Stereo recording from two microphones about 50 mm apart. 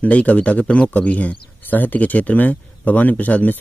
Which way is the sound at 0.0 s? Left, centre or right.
Left.